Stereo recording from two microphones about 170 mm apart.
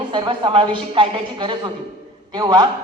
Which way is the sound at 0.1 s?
30° right (ahead or behind).